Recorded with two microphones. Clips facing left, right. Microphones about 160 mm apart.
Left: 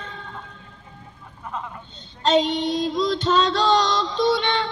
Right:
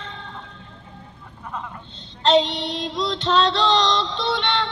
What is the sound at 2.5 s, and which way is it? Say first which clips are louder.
Music: left 4 dB; 45° left (ahead or behind).